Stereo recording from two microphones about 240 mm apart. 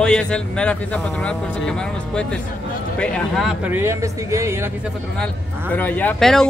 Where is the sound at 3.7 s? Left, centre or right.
Centre.